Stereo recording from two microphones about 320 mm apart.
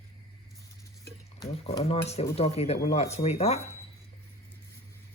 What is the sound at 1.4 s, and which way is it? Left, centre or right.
Speech, centre.